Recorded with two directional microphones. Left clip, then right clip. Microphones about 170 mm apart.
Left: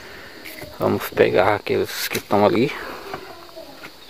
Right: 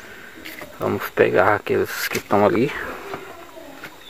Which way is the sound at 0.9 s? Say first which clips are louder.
Right 1 dB; 25° left (ahead or behind).